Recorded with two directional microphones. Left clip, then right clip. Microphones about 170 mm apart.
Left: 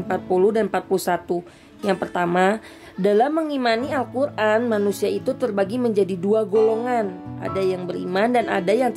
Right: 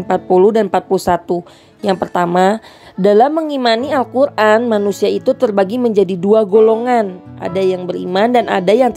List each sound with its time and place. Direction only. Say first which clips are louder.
0.1 s a woman's voice: right 8 dB; 40° right (ahead or behind)